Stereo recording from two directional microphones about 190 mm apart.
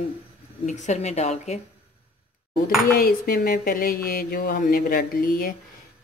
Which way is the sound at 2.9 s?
50° left (ahead or behind).